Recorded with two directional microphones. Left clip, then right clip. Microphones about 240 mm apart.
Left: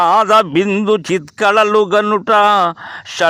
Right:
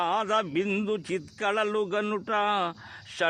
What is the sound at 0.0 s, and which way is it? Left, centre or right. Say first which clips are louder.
A man's voice: left 16 dB; left.